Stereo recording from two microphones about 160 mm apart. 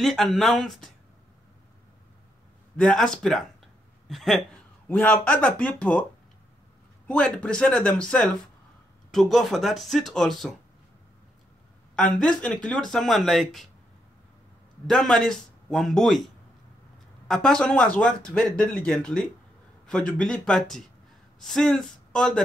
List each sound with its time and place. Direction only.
0.0 s speech: centre (ahead or behind)
2.8 s speech: centre (ahead or behind)
7.1 s speech: 5° left (ahead or behind)
11.9 s speech: 5° left (ahead or behind)
14.9 s speech: 5° left (ahead or behind)
17.3 s speech: 5° left (ahead or behind)